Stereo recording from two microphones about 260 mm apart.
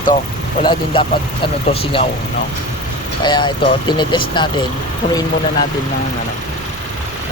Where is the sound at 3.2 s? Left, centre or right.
Centre.